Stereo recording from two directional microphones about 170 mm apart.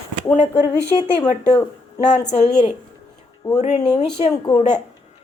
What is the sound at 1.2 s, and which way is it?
Speech, 40° left (ahead or behind).